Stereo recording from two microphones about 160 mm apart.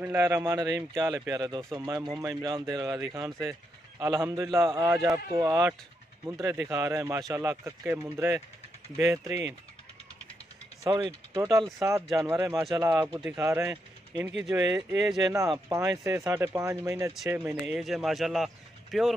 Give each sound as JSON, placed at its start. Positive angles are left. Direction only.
{"t": 0.0, "sound": "a man's voice", "side_deg": -15}
{"t": 10.8, "sound": "a man's voice", "side_deg": -30}